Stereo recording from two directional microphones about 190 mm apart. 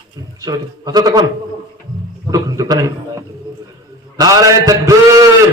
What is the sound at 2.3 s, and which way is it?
Speech, 20° right (ahead or behind).